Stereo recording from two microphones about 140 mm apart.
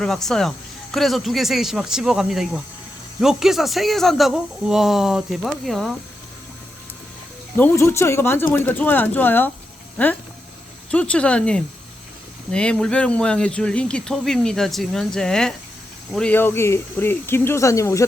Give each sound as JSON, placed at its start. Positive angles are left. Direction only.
{"t": 0.0, "sound": "speech", "side_deg": 0}
{"t": 7.5, "sound": "speech", "side_deg": 15}